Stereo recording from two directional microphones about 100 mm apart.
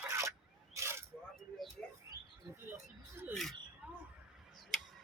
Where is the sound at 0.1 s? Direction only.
30° right (ahead or behind).